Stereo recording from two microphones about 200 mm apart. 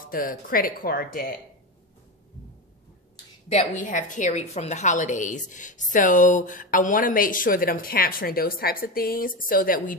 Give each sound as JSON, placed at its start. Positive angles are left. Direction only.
{"t": 0.0, "sound": "speech", "side_deg": 45}
{"t": 3.9, "sound": "a woman's voice", "side_deg": 40}